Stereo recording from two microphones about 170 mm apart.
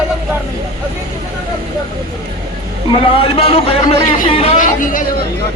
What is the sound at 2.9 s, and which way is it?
A man's voice, 35° left (ahead or behind).